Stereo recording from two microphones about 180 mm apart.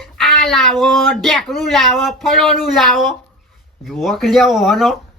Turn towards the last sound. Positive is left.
turn(degrees=0)  # may be behind; listen again after turning